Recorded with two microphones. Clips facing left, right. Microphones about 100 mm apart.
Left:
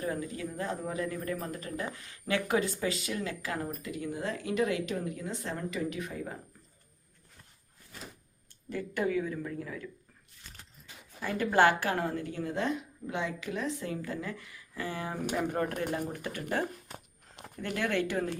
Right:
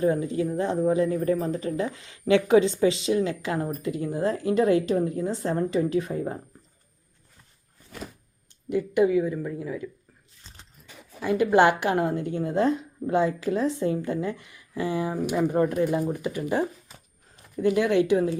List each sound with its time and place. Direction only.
0.0 s a woman's voice: 25° right (ahead or behind)
8.7 s speech: 15° right (ahead or behind)
10.5 s biting: 25° right (ahead or behind)
11.2 s a woman's voice: 15° right (ahead or behind)
17.4 s a sound: 80° left
17.7 s speech: 15° right (ahead or behind)